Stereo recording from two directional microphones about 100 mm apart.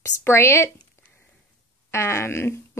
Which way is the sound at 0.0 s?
25° left (ahead or behind).